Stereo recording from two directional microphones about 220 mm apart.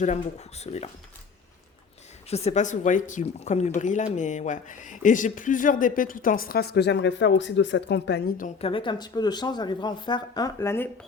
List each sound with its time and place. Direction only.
0.0 s speech: 30° left (ahead or behind)
2.3 s speech: 30° left (ahead or behind); by 8.4 s 50° left (ahead or behind)
8.6 s speech: 20° left (ahead or behind)